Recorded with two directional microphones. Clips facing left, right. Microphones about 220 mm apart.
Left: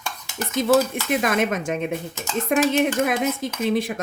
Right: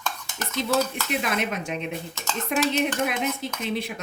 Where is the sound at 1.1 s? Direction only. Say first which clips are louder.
Left 9 dB; 50° left (ahead or behind).